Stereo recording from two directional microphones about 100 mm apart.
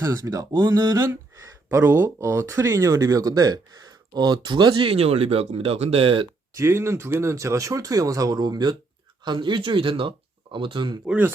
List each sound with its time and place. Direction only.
0.0 s speech: 35° right (ahead or behind)
1.7 s speech: 20° right (ahead or behind); by 6.2 s 65° right (ahead or behind)
6.6 s speech: 25° right (ahead or behind); by 11.0 s 50° right (ahead or behind)